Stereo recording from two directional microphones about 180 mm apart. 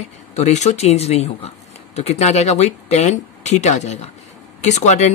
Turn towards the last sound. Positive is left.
turn(degrees=40)  # may be behind; listen again after turning